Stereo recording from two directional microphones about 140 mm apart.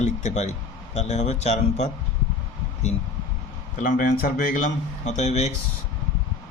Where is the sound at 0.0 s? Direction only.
60° left (ahead or behind).